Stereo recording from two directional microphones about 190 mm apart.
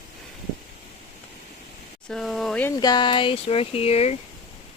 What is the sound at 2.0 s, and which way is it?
Speech, centre (ahead or behind).